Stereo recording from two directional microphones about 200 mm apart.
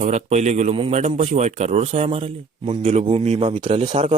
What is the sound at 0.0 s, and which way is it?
A man's voice, 35° right (ahead or behind).